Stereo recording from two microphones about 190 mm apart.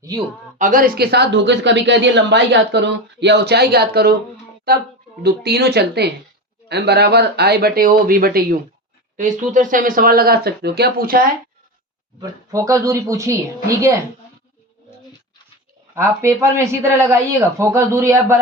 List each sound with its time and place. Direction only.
0.6 s speech: 45° right (ahead or behind)
5.2 s speech: 60° right (ahead or behind)
9.1 s speech: 40° right (ahead or behind)
12.2 s speech: 15° right (ahead or behind)
16.0 s speech: 15° right (ahead or behind)